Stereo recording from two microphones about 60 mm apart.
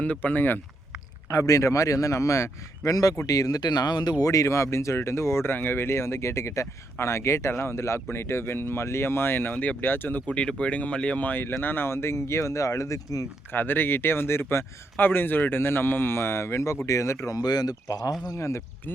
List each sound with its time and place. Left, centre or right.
0.0 s speech: left
1.3 s a man's voice: left
4.2 s speech: left
5.5 s speech: left
10.2 s speech: centre; by 13.2 s left
13.5 s speech: left
14.9 s speech: left
17.3 s speech: left
18.3 s speech: left